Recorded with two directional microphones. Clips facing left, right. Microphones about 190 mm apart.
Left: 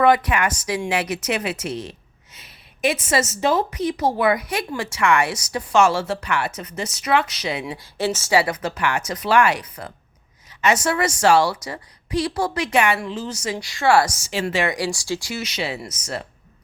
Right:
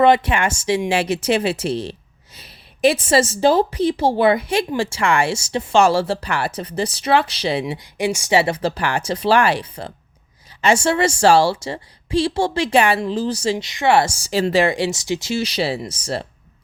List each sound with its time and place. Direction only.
0.0 s speech: 25° right (ahead or behind)
7.6 s a woman's voice: 20° right (ahead or behind)